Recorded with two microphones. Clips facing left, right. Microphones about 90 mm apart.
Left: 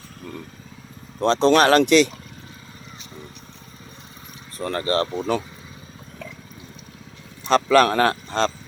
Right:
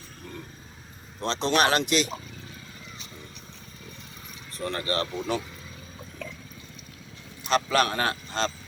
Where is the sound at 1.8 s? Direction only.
65° left (ahead or behind).